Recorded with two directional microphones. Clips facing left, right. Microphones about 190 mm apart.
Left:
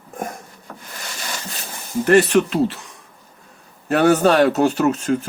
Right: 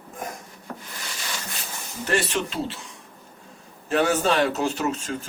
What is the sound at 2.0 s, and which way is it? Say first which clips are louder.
A man's voice: left 11 dB; 60° left (ahead or behind).